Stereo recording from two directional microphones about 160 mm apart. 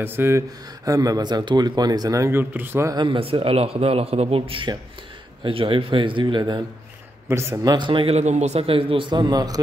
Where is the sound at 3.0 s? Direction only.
35° right (ahead or behind).